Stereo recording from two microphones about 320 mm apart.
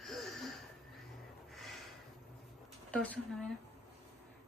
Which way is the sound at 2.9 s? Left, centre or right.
Centre.